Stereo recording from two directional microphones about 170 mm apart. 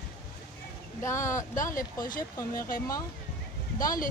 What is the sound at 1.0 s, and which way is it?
Speech, 15° left (ahead or behind).